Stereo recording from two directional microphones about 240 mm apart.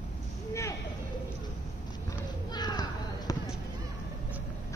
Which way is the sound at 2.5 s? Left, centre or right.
Centre.